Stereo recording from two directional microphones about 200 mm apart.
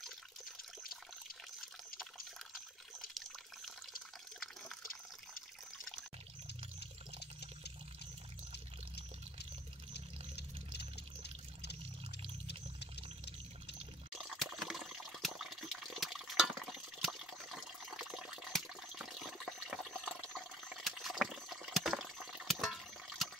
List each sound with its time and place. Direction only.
3.2 s water: centre (ahead or behind)
6.4 s water: 55° left (ahead or behind)
9.9 s pour: 55° left (ahead or behind)
14.1 s water: centre (ahead or behind)